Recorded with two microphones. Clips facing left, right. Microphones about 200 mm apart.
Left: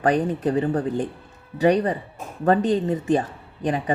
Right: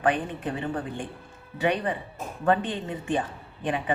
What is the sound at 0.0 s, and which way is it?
A woman's voice, 40° left (ahead or behind).